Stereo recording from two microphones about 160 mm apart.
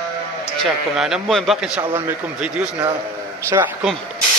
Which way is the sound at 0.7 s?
5° right (ahead or behind).